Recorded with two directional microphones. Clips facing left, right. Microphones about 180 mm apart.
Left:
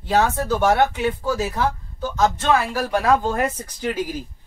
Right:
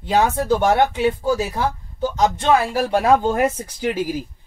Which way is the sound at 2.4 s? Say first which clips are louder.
Right 3 dB; 30° right (ahead or behind).